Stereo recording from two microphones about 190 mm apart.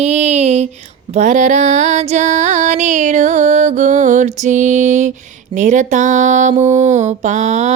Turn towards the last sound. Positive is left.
turn(degrees=-40)  # may be behind; listen again after turning